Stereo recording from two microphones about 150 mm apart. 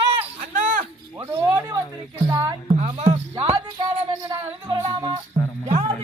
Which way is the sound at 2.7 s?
45° right (ahead or behind).